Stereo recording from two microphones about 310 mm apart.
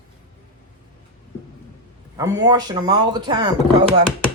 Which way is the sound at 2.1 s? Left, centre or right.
Centre.